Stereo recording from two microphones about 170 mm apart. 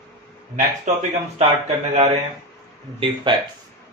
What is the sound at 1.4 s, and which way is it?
Speech, 40° right (ahead or behind).